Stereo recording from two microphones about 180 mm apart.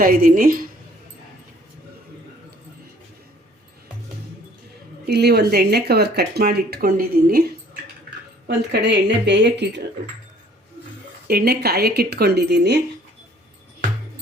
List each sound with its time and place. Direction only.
0.0 s a woman's voice: 50° right (ahead or behind)
5.0 s speech: 65° right (ahead or behind)
8.4 s a woman's voice: 70° right (ahead or behind)
11.3 s speech: 60° right (ahead or behind)